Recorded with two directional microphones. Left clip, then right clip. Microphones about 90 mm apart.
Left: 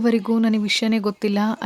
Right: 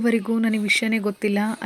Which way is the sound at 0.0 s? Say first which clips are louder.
Left 2 dB; 35° left (ahead or behind).